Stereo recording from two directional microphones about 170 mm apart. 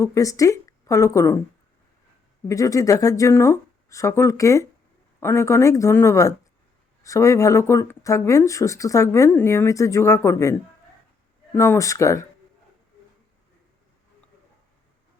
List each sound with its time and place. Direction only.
0.0 s a woman's voice: 20° left (ahead or behind)
2.5 s speech: 20° left (ahead or behind)
11.5 s speech: 15° left (ahead or behind)